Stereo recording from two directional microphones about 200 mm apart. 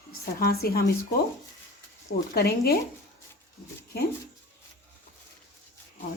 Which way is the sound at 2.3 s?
50° left (ahead or behind).